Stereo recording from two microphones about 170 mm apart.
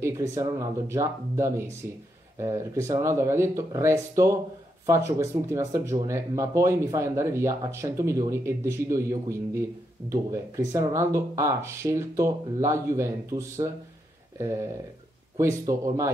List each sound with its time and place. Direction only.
0.0 s speech: 20° right (ahead or behind)
15.3 s speech: 20° right (ahead or behind)